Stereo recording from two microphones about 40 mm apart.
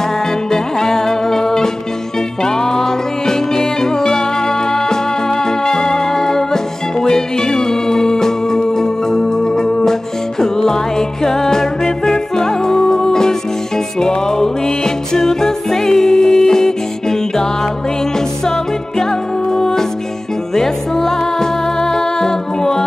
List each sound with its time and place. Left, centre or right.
0.5 s music: centre
5.7 s music: centre
20.5 s music: centre
21.9 s a capella: centre